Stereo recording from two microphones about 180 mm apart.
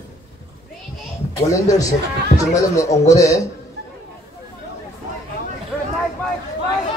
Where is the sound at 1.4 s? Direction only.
20° left (ahead or behind).